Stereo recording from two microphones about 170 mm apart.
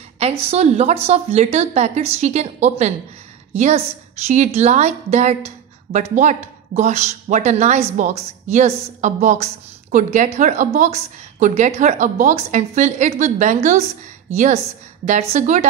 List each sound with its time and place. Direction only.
0.2 s a woman's voice: 35° right (ahead or behind)